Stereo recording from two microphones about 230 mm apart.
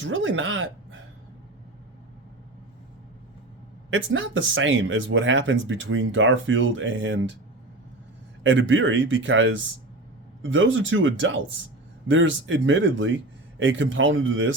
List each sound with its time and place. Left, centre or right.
0.0 s speech: right
3.8 s speech: right
8.4 s speech: right